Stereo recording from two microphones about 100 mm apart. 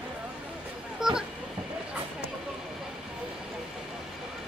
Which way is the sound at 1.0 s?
5° right (ahead or behind).